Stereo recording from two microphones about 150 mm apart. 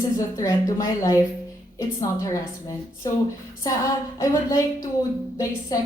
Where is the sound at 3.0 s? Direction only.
25° left (ahead or behind).